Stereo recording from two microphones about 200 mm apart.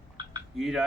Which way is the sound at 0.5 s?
Centre (ahead or behind).